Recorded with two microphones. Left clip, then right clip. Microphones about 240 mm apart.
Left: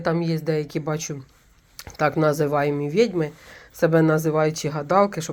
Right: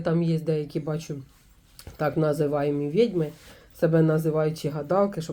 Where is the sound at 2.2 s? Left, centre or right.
Left.